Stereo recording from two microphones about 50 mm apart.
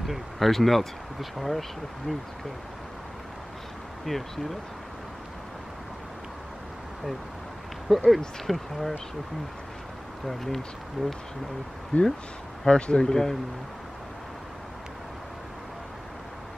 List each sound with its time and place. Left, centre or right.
0.0 s speech: centre
4.0 s speech: centre
7.9 s speech: centre
10.2 s speech: centre
11.0 s speech: centre
11.9 s speech: left; by 13.4 s centre